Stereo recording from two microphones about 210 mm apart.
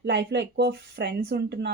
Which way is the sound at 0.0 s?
55° right (ahead or behind).